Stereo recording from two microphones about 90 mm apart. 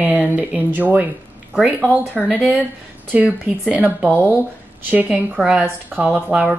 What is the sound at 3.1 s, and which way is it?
Speech, 15° right (ahead or behind).